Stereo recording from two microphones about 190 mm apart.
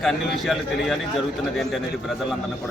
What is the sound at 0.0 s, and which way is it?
Speech, centre (ahead or behind).